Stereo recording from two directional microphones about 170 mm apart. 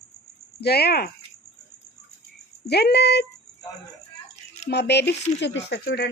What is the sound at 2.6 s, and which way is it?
Speech, 75° left (ahead or behind).